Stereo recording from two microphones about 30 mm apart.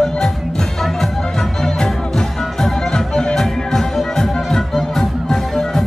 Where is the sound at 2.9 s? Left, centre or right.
Left.